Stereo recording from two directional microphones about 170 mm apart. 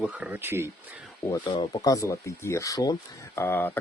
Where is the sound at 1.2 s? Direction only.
20° left (ahead or behind).